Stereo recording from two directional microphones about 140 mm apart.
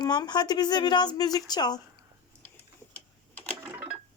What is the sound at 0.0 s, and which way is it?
Speech, 30° left (ahead or behind).